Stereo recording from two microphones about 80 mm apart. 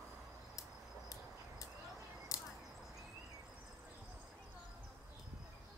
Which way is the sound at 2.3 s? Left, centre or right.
Left.